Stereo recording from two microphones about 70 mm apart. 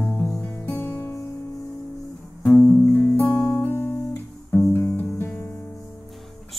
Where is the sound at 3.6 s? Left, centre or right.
Left.